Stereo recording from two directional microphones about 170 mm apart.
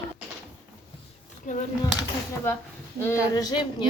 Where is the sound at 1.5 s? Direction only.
50° left (ahead or behind).